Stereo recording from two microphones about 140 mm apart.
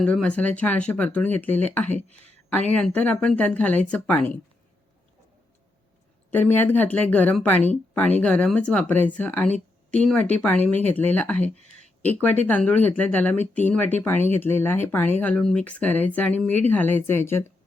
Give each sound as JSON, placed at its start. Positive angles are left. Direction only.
{"t": 0.0, "sound": "speech", "side_deg": 5}
{"t": 6.3, "sound": "speech", "side_deg": 15}
{"t": 11.5, "sound": "a sound", "side_deg": -50}
{"t": 12.1, "sound": "speech", "side_deg": 10}